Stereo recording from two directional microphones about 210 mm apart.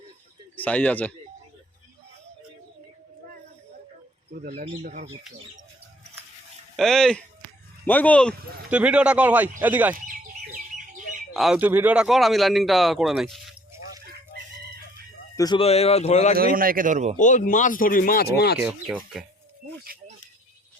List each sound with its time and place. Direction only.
0.5 s speech: 5° left (ahead or behind)
4.3 s speech: 45° right (ahead or behind)
6.7 s a man's voice: centre (ahead or behind)
8.7 s speech: 5° right (ahead or behind)
10.1 s chicken: 40° right (ahead or behind)
11.3 s a man's voice: centre (ahead or behind)
15.4 s a man's voice: 20° left (ahead or behind)
16.6 s speech: 40° right (ahead or behind)
17.2 s speech: 35° left (ahead or behind)
18.6 s a man's voice: centre (ahead or behind)
19.8 s music: 45° right (ahead or behind)